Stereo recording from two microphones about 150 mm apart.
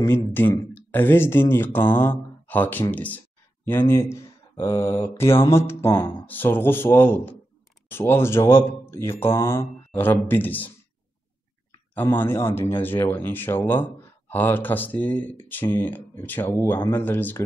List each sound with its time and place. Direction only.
0.0 s speech: 15° left (ahead or behind)
12.2 s speech: 15° left (ahead or behind)